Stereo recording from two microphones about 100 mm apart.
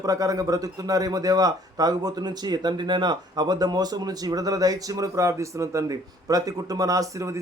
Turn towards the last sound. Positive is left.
turn(degrees=-30)  # may be behind; listen again after turning